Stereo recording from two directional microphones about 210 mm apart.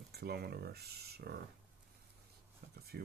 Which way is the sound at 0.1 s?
50° right (ahead or behind).